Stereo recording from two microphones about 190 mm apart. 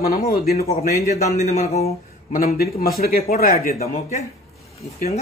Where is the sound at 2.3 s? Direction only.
50° left (ahead or behind).